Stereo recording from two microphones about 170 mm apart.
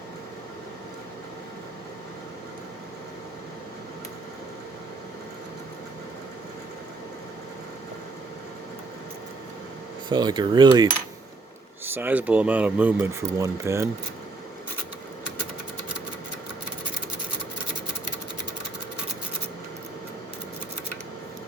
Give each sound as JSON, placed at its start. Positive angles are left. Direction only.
{"t": 10.1, "sound": "cutlery", "side_deg": -25}
{"t": 11.9, "sound": "speech", "side_deg": -10}